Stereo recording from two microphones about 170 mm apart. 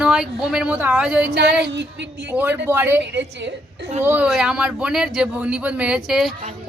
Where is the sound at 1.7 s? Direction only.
90° right.